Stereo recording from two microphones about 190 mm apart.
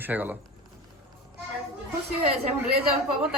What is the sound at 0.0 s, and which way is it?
Speech, 10° right (ahead or behind).